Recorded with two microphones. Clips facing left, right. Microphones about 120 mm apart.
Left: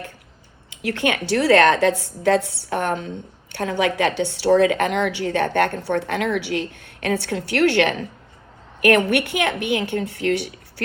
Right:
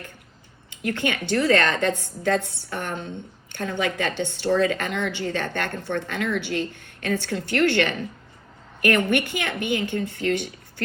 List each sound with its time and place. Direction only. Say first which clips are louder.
0.7 s speech: left 3 dB; 65° left (ahead or behind)